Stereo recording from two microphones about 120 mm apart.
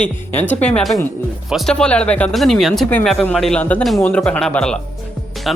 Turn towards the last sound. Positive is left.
turn(degrees=0)  # may be behind; listen again after turning